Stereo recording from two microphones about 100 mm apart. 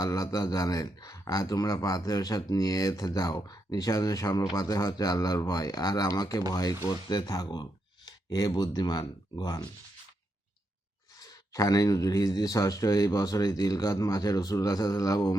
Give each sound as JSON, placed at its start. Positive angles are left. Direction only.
{"t": 0.0, "sound": "speech", "side_deg": 35}
{"t": 11.2, "sound": "speech", "side_deg": 35}